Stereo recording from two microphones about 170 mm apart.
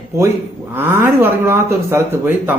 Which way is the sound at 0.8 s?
15° right (ahead or behind).